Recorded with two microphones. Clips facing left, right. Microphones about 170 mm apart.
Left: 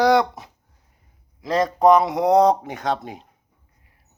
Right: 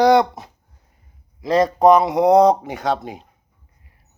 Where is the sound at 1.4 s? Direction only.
5° right (ahead or behind).